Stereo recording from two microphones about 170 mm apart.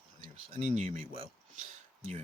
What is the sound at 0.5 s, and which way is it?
Speech, 45° right (ahead or behind).